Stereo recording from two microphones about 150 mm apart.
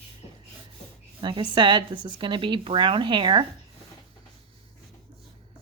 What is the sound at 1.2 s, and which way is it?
Speech, 30° right (ahead or behind).